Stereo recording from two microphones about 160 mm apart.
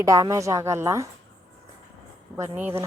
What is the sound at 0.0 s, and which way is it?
A woman's voice, 20° right (ahead or behind).